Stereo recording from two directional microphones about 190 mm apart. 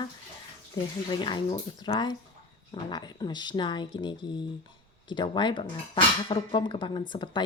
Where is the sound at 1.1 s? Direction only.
25° left (ahead or behind).